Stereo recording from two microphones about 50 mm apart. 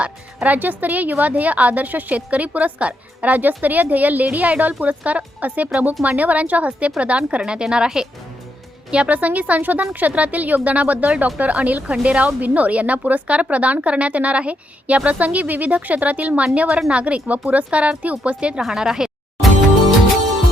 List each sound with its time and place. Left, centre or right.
0.4 s a woman's voice: right; by 8.0 s centre
8.9 s a woman's voice: right
18.6 s a woman's voice: centre